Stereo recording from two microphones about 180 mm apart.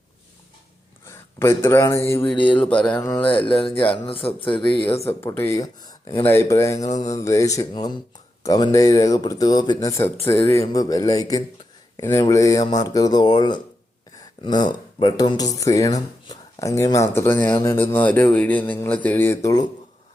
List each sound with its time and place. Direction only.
1.0 s speech: 15° left (ahead or behind)
3.9 s speech: 30° left (ahead or behind)
4.5 s speech: 10° left (ahead or behind)